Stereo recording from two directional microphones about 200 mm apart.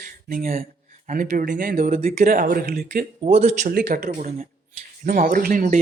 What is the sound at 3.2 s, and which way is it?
A man's voice, 30° right (ahead or behind).